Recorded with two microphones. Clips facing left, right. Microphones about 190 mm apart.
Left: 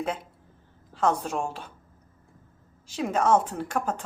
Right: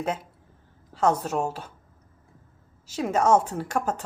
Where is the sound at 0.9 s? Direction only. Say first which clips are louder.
Right 2 dB; 10° right (ahead or behind).